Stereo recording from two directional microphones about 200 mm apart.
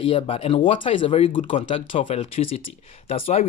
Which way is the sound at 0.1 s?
25° left (ahead or behind).